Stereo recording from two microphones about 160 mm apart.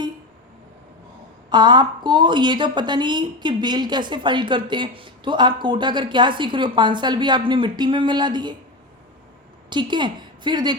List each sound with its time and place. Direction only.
1.5 s a woman's voice: 25° right (ahead or behind)
9.6 s a woman's voice: 30° right (ahead or behind)